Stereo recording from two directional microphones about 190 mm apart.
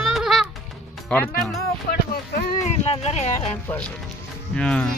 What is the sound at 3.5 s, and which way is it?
Speech, 5° left (ahead or behind).